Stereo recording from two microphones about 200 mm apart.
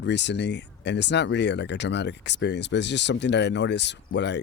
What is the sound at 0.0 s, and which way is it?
Speech, 60° left (ahead or behind).